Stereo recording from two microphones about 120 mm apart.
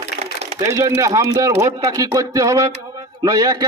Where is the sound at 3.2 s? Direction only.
30° right (ahead or behind).